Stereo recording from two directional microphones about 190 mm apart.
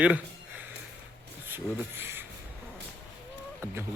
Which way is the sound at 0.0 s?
5° right (ahead or behind).